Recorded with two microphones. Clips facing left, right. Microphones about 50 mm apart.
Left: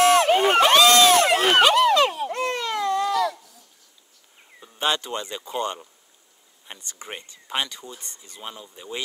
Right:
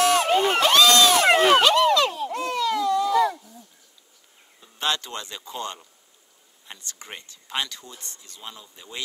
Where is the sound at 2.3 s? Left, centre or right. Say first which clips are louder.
Right 1 dB; left.